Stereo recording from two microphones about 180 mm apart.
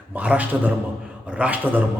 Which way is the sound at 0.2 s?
10° right (ahead or behind).